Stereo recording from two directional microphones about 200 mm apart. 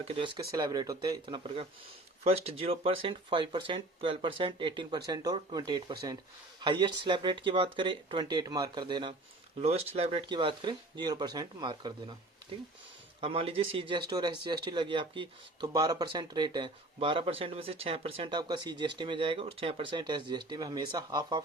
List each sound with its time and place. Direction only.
0.0 s speech: 20° right (ahead or behind)
13.2 s speech: 30° right (ahead or behind)